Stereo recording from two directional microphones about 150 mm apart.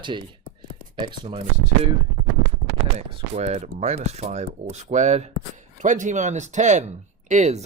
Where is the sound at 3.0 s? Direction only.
45° right (ahead or behind).